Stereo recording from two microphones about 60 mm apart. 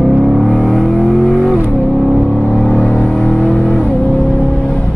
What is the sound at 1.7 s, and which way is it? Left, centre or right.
Music, centre.